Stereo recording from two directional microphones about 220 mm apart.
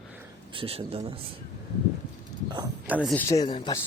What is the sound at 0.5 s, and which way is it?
Speech, 25° right (ahead or behind).